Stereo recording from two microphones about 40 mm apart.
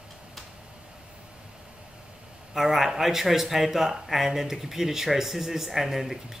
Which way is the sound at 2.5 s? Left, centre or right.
Centre.